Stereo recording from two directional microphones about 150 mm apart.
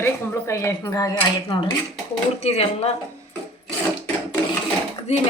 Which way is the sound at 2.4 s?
45° left (ahead or behind).